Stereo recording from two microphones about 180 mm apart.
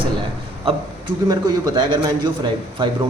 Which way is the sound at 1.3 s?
20° right (ahead or behind).